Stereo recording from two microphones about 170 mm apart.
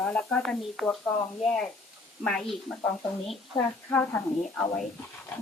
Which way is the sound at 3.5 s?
10° left (ahead or behind).